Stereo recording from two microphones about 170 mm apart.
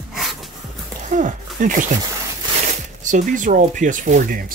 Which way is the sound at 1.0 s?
50° right (ahead or behind).